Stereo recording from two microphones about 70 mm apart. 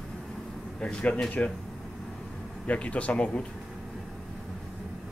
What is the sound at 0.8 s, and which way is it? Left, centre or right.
Speech, centre.